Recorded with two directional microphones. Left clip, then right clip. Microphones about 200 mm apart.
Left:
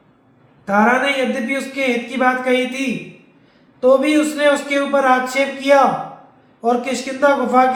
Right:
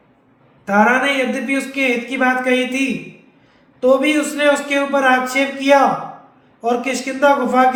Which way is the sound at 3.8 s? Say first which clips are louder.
Left 1 dB; 25° right (ahead or behind).